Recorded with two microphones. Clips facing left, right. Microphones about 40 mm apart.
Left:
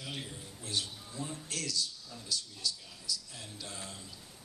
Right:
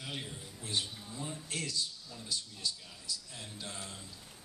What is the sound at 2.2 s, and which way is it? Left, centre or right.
A man's voice, right.